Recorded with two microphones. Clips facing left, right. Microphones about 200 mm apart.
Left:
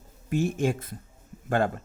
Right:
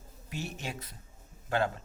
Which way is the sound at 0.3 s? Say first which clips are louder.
Left 14 dB; 50° left (ahead or behind).